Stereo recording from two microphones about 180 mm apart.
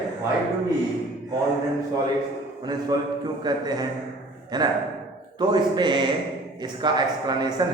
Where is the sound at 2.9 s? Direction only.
20° right (ahead or behind).